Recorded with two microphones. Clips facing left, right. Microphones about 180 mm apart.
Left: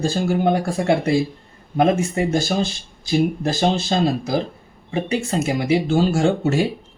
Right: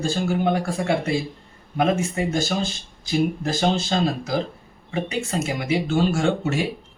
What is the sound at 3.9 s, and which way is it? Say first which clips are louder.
Speech: left 3 dB; 30° left (ahead or behind).